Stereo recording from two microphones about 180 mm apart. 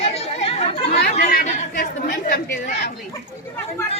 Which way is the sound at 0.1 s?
35° left (ahead or behind).